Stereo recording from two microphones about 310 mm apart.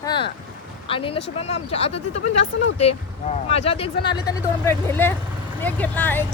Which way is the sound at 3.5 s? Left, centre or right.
Centre.